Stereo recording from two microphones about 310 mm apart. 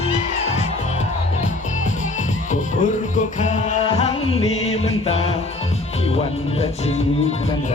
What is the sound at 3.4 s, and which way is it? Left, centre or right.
Music, left.